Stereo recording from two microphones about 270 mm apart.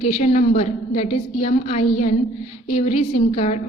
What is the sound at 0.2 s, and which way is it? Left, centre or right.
A woman's voice, left.